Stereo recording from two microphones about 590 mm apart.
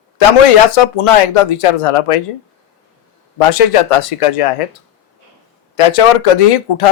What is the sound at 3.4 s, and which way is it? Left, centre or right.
Speech, left.